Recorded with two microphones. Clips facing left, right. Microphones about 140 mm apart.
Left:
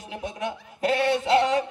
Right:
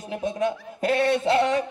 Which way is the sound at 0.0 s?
25° left (ahead or behind).